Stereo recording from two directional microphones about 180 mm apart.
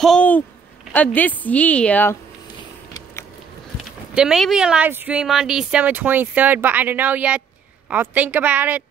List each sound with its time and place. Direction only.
0.0 s a woman's voice: 5° left (ahead or behind)
4.1 s speech: 5° right (ahead or behind)